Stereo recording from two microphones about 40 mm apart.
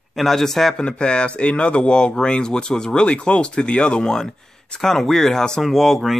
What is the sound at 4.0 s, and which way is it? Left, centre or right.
Speech, centre.